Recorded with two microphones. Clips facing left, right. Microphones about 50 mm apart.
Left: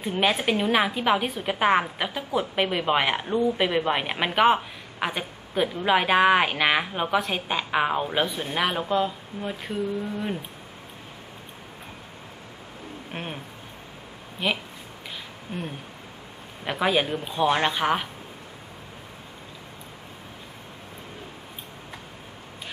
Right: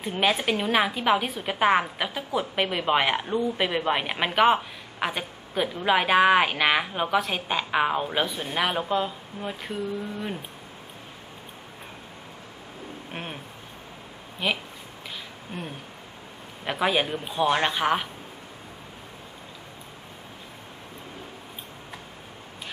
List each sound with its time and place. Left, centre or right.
0.0 s a woman's voice: centre
13.1 s a woman's voice: centre
14.4 s a woman's voice: centre